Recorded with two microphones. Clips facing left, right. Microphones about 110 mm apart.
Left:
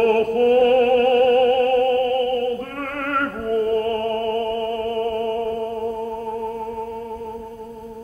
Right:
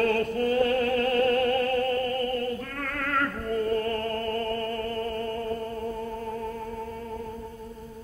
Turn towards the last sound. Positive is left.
turn(degrees=40)  # may be behind; listen again after turning